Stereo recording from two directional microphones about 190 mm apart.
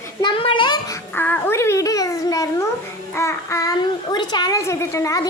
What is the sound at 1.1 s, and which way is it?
A child's voice, 10° left (ahead or behind).